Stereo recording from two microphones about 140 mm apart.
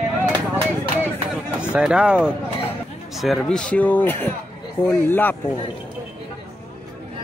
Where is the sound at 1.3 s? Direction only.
5° right (ahead or behind).